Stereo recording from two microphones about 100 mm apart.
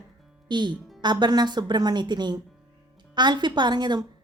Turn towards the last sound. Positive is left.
turn(degrees=-45)  # may be behind; listen again after turning